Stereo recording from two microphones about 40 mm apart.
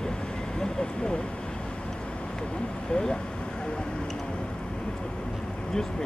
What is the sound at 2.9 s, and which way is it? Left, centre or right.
Vehicle, centre.